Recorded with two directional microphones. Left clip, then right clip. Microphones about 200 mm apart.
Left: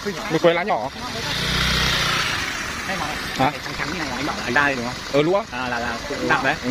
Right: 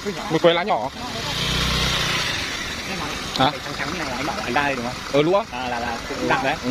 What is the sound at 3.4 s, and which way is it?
Speech, 10° right (ahead or behind).